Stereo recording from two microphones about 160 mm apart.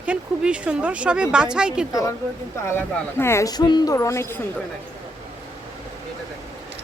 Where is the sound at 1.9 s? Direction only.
20° left (ahead or behind).